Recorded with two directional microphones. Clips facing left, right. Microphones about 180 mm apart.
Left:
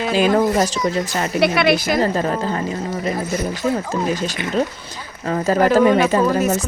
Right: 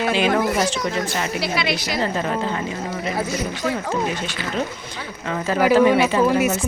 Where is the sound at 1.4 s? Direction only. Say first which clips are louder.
Left 12 dB; 55° left (ahead or behind).